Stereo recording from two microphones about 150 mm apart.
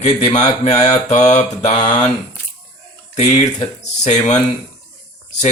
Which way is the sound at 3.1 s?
50° left (ahead or behind).